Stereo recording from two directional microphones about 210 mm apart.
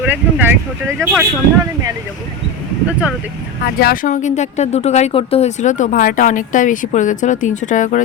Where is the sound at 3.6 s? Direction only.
45° left (ahead or behind).